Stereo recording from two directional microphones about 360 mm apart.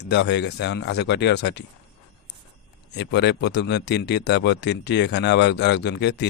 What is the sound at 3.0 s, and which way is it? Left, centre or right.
Speech, left.